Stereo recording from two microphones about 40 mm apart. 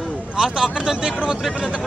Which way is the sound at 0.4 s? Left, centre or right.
Centre.